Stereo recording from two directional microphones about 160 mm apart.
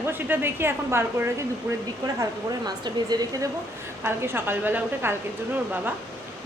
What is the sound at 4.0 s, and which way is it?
A woman's voice, 15° right (ahead or behind).